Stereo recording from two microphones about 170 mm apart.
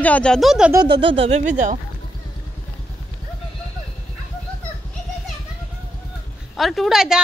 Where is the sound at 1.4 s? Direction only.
50° right (ahead or behind).